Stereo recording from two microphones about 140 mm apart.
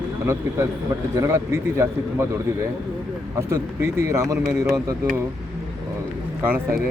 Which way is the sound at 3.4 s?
20° right (ahead or behind).